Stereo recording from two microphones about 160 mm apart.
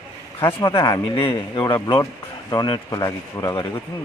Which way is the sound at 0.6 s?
20° left (ahead or behind).